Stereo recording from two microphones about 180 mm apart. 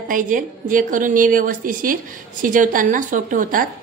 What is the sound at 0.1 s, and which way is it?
A woman's voice, 50° right (ahead or behind).